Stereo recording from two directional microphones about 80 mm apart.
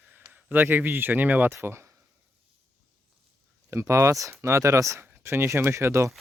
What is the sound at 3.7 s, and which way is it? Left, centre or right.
Speech, right.